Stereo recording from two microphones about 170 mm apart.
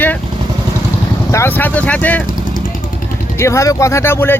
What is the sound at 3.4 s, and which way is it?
Speech, 15° left (ahead or behind).